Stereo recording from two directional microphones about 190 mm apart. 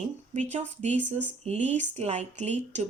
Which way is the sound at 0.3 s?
40° right (ahead or behind).